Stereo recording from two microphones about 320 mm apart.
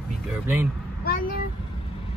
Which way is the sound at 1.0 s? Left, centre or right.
Left.